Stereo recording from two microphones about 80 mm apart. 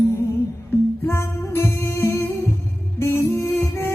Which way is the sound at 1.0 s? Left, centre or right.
Left.